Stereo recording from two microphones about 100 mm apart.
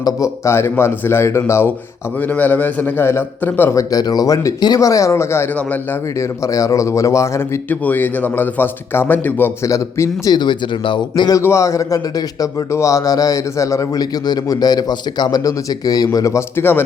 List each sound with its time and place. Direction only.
0.0 s speech: 30° left (ahead or behind)
3.8 s a man's voice: 40° left (ahead or behind); by 9.5 s 20° left (ahead or behind)
9.6 s a man's voice: 35° left (ahead or behind)
10.3 s speech: 50° left (ahead or behind)
11.3 s a man's voice: 30° left (ahead or behind)